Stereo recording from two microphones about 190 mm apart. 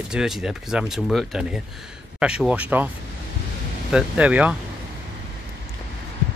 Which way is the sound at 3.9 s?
5° right (ahead or behind).